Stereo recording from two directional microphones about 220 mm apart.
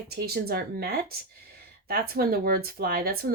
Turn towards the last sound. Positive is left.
turn(degrees=-45)  # may be behind; listen again after turning